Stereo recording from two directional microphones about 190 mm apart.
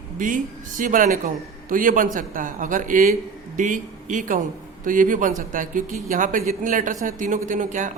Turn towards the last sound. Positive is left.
turn(degrees=-40)  # may be behind; listen again after turning